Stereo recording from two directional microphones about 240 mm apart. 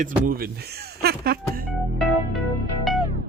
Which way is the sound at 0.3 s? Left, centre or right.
Right.